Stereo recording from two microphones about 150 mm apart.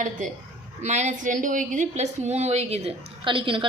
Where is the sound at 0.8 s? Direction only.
50° right (ahead or behind).